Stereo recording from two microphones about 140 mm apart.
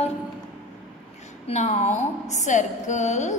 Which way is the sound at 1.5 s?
55° left (ahead or behind).